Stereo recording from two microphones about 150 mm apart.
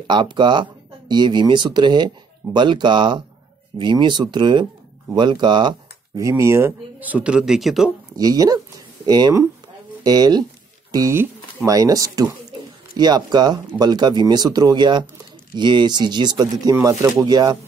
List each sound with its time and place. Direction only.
0.0 s speech: 30° right (ahead or behind); by 7.9 s centre (ahead or behind)
8.2 s a sound: 25° right (ahead or behind)
10.0 s speech: 25° right (ahead or behind)